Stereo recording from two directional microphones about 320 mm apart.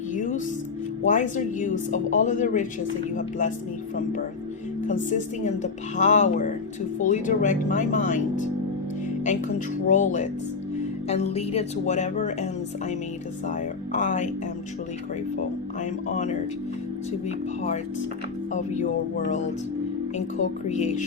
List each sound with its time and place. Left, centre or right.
0.1 s music: left
1.0 s speech: left
5.1 s speech: left
9.8 s speech: left
13.5 s speech: left
15.4 s speech: left
20.7 s speech: left